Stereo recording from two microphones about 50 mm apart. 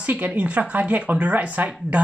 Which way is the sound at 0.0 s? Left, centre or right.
Right.